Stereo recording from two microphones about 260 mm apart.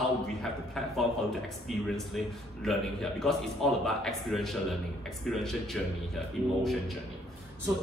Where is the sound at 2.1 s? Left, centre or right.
Centre.